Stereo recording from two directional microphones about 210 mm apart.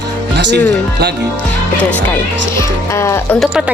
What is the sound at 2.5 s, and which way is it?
Speech, 15° left (ahead or behind).